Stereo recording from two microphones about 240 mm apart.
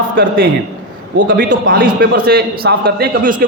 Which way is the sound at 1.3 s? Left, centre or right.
Right.